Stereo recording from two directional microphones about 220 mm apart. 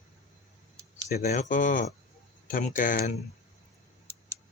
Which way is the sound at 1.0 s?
30° left (ahead or behind).